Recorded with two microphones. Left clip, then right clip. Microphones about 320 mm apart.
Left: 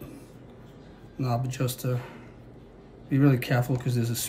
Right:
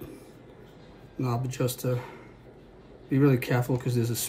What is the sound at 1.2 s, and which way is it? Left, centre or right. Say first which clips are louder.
Speech: even; centre.